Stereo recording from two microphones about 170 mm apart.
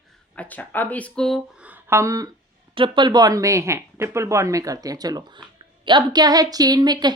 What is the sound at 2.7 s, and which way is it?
Speech, 30° right (ahead or behind).